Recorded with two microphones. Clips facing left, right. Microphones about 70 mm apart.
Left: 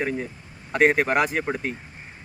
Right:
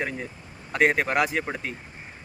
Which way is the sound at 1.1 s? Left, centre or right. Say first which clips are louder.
Left 2 dB; left.